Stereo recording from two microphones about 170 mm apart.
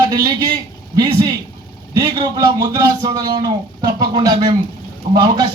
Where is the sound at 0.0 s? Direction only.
20° right (ahead or behind).